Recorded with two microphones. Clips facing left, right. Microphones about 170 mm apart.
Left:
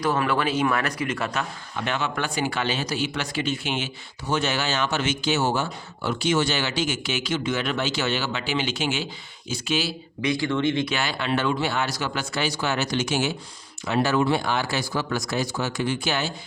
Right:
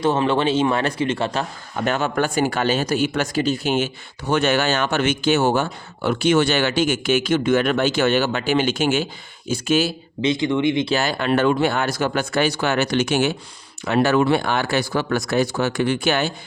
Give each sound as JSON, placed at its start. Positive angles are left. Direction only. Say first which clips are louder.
{"t": 0.0, "sound": "speech", "louder": "right 5 dB", "side_deg": -25}
{"t": 1.7, "sound": "speech", "louder": "right 6 dB", "side_deg": -45}
{"t": 4.3, "sound": "speech", "louder": "right 6 dB", "side_deg": -60}
{"t": 10.2, "sound": "speech", "louder": "right 4 dB", "side_deg": -20}
{"t": 10.8, "sound": "speech", "louder": "right 6 dB", "side_deg": -40}